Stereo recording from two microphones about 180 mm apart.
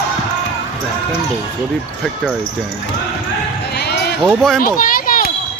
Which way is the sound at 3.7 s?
65° left (ahead or behind).